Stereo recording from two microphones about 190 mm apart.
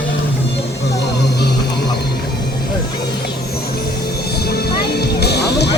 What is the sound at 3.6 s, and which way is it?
Music, 55° left (ahead or behind).